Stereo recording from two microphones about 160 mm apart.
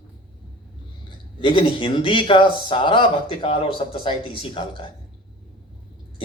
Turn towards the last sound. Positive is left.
turn(degrees=30)  # may be behind; listen again after turning